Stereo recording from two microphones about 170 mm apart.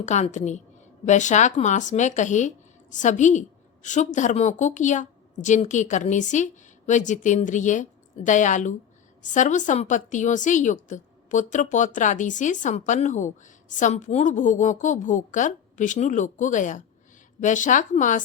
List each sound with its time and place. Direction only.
0.0 s a woman's voice: 45° left (ahead or behind)